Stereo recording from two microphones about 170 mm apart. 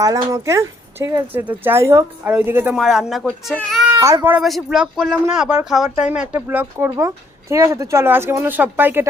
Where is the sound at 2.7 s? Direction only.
Centre (ahead or behind).